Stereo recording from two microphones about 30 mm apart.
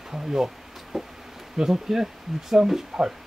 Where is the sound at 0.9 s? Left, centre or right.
Centre.